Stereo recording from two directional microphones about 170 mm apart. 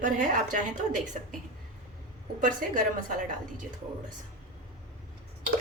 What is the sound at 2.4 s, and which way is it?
Speech, 50° right (ahead or behind).